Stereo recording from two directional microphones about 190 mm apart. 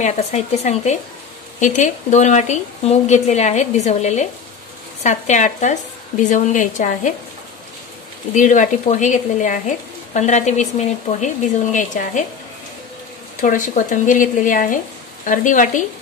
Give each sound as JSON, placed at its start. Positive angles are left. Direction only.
{"t": 0.0, "sound": "speech", "side_deg": 35}
{"t": 8.4, "sound": "speech", "side_deg": 40}
{"t": 13.4, "sound": "speech", "side_deg": 45}